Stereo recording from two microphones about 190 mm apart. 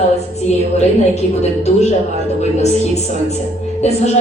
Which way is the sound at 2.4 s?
35° left (ahead or behind).